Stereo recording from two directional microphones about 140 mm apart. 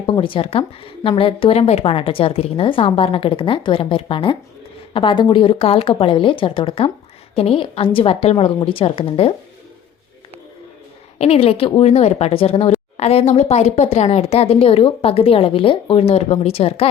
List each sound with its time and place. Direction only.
0.0 s a woman's voice: 35° left (ahead or behind)
11.2 s speech: 45° left (ahead or behind)